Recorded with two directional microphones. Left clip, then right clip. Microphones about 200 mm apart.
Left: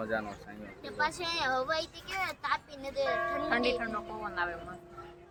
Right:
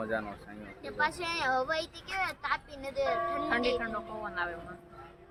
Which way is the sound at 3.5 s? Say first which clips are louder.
Even; 10° left (ahead or behind).